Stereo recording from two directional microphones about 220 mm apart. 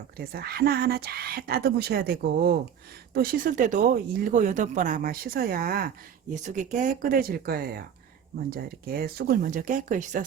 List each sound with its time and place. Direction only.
0.2 s speech: 45° right (ahead or behind)